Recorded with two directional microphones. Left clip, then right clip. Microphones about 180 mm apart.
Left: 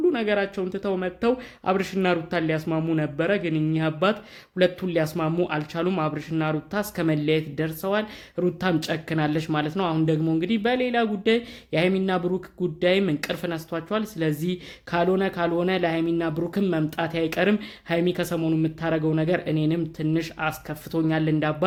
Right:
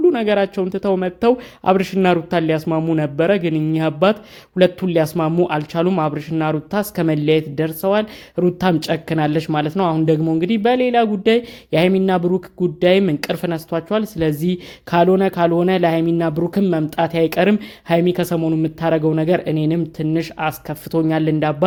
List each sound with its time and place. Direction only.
0.1 s speech: 35° right (ahead or behind)